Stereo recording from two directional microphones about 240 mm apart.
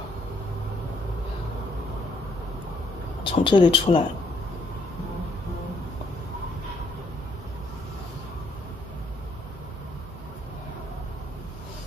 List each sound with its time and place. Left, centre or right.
3.3 s speech: left